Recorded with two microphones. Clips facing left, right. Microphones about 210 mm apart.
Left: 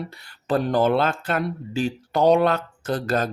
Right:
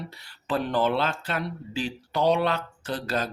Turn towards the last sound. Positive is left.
turn(degrees=50)  # may be behind; listen again after turning